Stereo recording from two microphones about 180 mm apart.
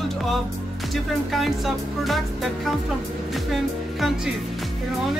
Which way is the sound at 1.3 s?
Centre (ahead or behind).